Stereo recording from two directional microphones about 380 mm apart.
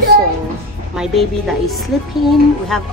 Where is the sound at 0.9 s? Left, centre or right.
Centre.